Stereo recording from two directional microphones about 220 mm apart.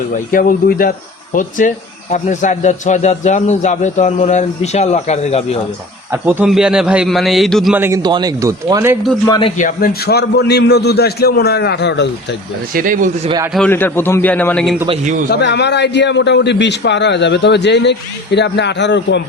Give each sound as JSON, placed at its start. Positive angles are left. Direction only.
{"t": 0.3, "sound": "speech", "side_deg": 40}
{"t": 6.1, "sound": "a man's voice", "side_deg": -10}
{"t": 9.2, "sound": "a man's voice", "side_deg": 20}
{"t": 9.6, "sound": "a man's voice", "side_deg": 40}
{"t": 12.7, "sound": "speech", "side_deg": -40}
{"t": 13.5, "sound": "a man's voice", "side_deg": 5}
{"t": 15.3, "sound": "a man's voice", "side_deg": 50}